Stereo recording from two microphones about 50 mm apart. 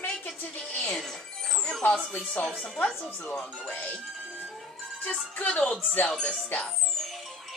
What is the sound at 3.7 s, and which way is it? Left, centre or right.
Speech, left.